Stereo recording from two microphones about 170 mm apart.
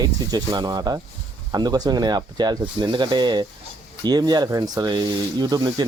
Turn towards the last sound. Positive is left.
turn(degrees=-25)  # may be behind; listen again after turning